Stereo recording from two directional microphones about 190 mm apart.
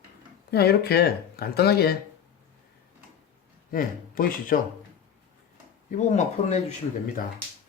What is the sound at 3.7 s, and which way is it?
Speech, 50° left (ahead or behind).